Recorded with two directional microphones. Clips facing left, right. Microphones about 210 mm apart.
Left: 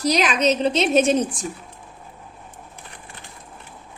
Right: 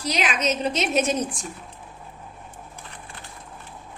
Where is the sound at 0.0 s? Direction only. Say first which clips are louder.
Left 6 dB; 40° left (ahead or behind).